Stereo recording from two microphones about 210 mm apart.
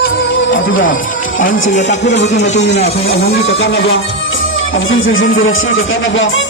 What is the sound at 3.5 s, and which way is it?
Speech, 65° left (ahead or behind).